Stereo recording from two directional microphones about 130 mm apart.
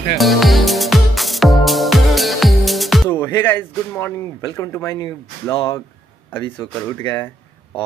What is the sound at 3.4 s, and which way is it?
Speech, 15° left (ahead or behind).